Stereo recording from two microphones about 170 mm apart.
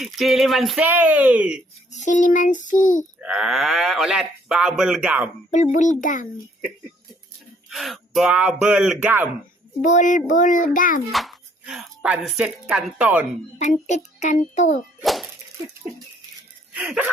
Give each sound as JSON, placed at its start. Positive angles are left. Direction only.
{"t": 0.0, "sound": "speech", "side_deg": 0}
{"t": 1.9, "sound": "a child's voice", "side_deg": 45}
{"t": 3.2, "sound": "speech", "side_deg": -5}
{"t": 5.7, "sound": "a child's voice", "side_deg": 45}
{"t": 7.7, "sound": "speech", "side_deg": 0}
{"t": 9.8, "sound": "a child's voice", "side_deg": 45}
{"t": 11.1, "sound": "a woman's voice", "side_deg": 0}
{"t": 13.6, "sound": "a child's voice", "side_deg": 45}
{"t": 15.0, "sound": "speech", "side_deg": 0}
{"t": 16.7, "sound": "speech", "side_deg": -5}